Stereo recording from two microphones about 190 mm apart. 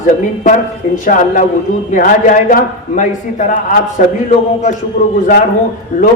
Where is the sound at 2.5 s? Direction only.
45° left (ahead or behind).